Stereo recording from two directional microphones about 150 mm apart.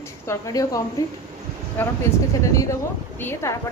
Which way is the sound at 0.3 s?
20° left (ahead or behind).